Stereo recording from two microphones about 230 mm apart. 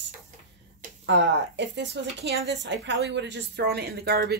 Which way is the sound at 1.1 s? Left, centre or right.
Right.